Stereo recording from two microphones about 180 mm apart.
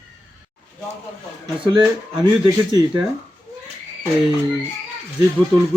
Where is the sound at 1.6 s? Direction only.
25° right (ahead or behind).